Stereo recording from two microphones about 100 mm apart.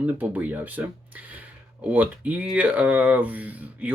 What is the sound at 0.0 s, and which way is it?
Speech, 15° right (ahead or behind).